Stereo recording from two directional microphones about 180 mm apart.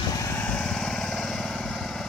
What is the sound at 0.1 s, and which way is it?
Lawn mower, 15° left (ahead or behind).